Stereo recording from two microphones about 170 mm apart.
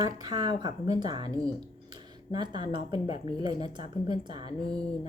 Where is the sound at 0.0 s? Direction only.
25° right (ahead or behind).